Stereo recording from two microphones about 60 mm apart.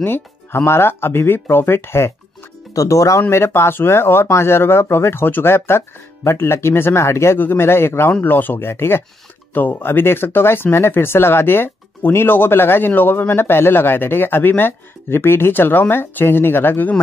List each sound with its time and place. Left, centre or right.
0.0 s speech: left
2.7 s speech: left
7.3 s speech: left
8.2 s speech: left
8.6 s speech: left
9.5 s speech: left